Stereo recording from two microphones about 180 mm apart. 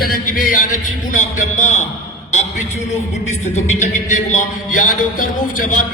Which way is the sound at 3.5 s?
40° left (ahead or behind).